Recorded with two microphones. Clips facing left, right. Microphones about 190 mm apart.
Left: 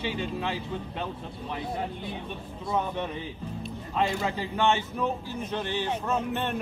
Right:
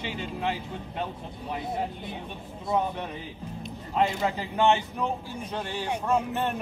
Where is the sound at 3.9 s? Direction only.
15° right (ahead or behind).